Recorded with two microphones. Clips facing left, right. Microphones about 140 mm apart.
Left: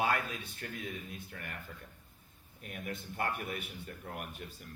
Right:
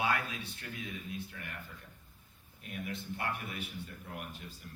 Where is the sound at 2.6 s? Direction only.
45° left (ahead or behind).